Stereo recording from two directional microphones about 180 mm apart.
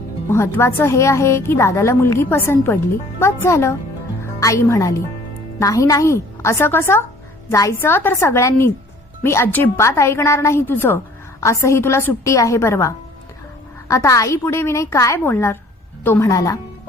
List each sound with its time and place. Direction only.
0.3 s a woman's voice: 15° left (ahead or behind)